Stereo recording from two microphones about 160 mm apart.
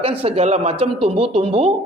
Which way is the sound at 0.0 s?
35° right (ahead or behind).